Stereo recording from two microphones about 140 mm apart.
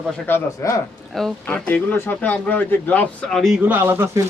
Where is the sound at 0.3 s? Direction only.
20° left (ahead or behind); by 4.2 s 20° right (ahead or behind).